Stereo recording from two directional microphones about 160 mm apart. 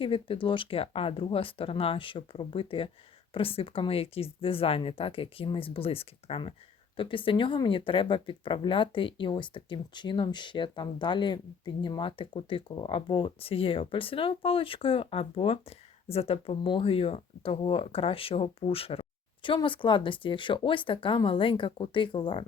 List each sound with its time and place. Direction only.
0.0 s speech: 35° left (ahead or behind)